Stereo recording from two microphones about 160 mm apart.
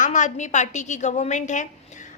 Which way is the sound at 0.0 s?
50° left (ahead or behind).